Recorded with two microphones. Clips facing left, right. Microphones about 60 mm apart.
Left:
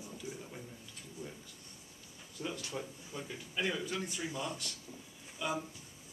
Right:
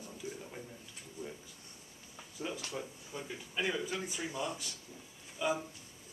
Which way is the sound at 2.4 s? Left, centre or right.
Centre.